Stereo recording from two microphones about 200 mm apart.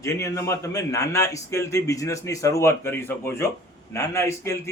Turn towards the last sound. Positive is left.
turn(degrees=15)  # may be behind; listen again after turning